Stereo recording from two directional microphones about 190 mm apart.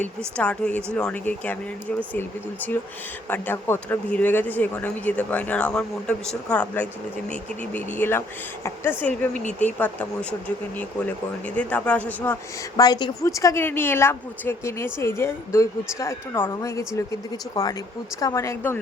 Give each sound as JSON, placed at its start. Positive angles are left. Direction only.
{"t": 0.3, "sound": "a woman's voice", "side_deg": 5}
{"t": 3.2, "sound": "speech", "side_deg": 10}